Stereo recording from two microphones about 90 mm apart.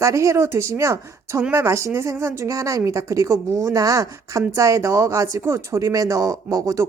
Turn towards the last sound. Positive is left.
turn(degrees=-40)  # may be behind; listen again after turning